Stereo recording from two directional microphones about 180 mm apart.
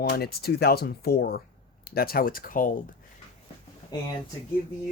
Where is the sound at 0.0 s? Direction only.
65° left (ahead or behind).